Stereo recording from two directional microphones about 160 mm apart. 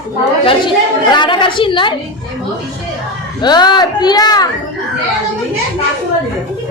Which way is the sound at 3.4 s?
25° left (ahead or behind).